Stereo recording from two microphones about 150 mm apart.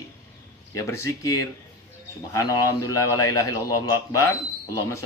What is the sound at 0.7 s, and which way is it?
A man's voice, 20° left (ahead or behind).